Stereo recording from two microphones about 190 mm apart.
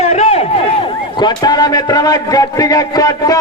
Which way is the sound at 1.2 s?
20° left (ahead or behind).